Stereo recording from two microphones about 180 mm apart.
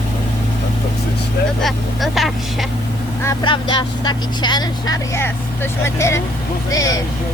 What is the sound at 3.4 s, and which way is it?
Speech, 25° left (ahead or behind).